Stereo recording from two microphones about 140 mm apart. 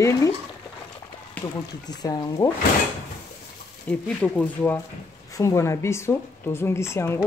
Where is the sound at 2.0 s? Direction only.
30° left (ahead or behind).